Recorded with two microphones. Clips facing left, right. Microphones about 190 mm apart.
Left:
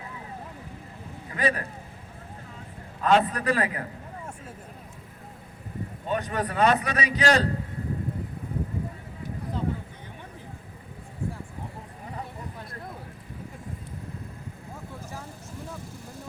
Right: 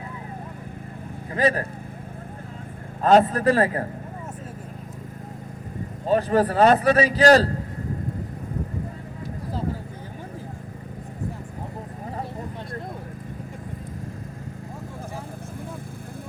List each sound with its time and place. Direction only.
1.3 s speech: 40° right (ahead or behind)
3.0 s speech: 40° right (ahead or behind)
6.1 s speech: 35° right (ahead or behind)